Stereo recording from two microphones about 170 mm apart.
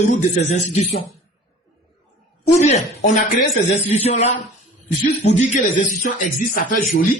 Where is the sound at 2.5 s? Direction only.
45° left (ahead or behind).